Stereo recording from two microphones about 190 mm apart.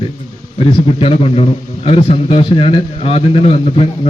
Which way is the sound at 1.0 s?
30° left (ahead or behind).